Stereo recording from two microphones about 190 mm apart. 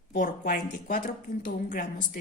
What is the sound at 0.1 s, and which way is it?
A woman's voice, 45° left (ahead or behind).